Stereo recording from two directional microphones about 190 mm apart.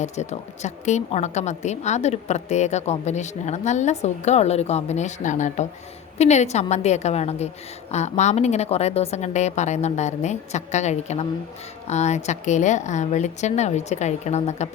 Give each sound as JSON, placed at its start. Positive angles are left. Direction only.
{"t": 0.0, "sound": "a woman's voice", "side_deg": 35}